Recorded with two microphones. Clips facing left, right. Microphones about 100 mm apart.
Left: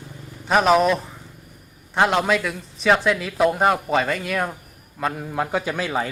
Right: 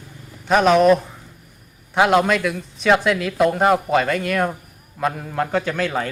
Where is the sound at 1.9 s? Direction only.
5° right (ahead or behind).